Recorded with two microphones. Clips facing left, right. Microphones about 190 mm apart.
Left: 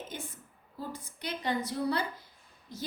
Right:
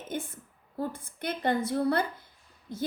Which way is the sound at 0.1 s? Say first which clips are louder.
Right 7 dB; 55° right (ahead or behind).